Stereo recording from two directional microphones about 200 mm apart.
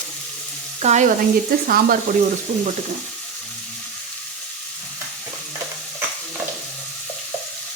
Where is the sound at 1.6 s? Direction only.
45° right (ahead or behind).